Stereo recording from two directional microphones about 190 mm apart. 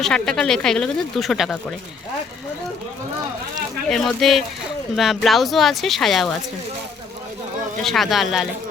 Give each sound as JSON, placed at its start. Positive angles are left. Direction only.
{"t": 0.0, "sound": "speech", "side_deg": 5}
{"t": 3.8, "sound": "speech", "side_deg": 0}
{"t": 7.8, "sound": "speech", "side_deg": 0}